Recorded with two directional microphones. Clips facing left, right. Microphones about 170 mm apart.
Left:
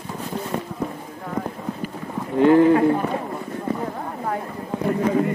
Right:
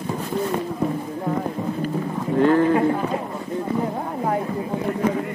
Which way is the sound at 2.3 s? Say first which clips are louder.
Left 3 dB; 15° left (ahead or behind).